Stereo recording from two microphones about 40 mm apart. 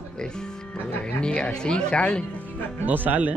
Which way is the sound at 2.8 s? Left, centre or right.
Right.